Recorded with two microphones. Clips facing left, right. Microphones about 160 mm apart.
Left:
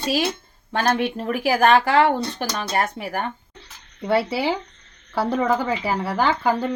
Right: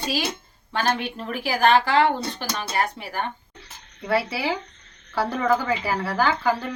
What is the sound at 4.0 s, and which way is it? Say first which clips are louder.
Speech: left 3 dB; 25° left (ahead or behind).